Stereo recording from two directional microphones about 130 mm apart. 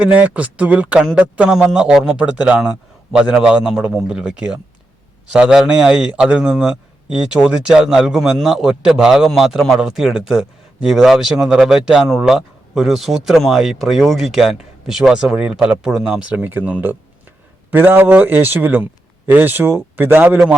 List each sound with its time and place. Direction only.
0.0 s a man's voice: 10° right (ahead or behind)